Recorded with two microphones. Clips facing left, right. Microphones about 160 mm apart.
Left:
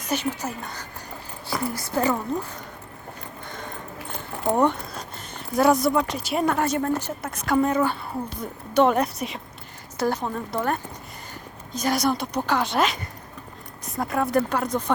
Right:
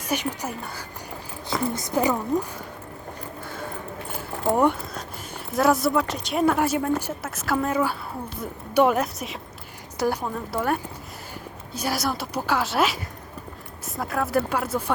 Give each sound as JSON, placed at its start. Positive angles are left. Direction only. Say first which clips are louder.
{"t": 0.0, "sound": "speech", "louder": "left 1 dB", "side_deg": -15}
{"t": 3.4, "sound": "a sound", "louder": "right 2 dB", "side_deg": -5}
{"t": 4.5, "sound": "speech", "louder": "even", "side_deg": -10}